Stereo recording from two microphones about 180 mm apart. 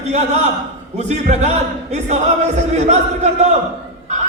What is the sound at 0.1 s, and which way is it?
Speech, 40° right (ahead or behind).